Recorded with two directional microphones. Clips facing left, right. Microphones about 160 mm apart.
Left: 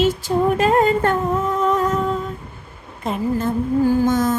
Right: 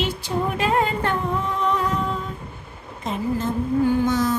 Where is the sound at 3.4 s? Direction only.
50° left (ahead or behind).